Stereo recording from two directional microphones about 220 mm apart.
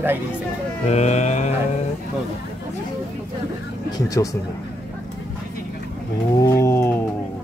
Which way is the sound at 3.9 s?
15° left (ahead or behind).